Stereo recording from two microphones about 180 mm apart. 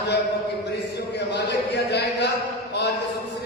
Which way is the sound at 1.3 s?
70° left (ahead or behind).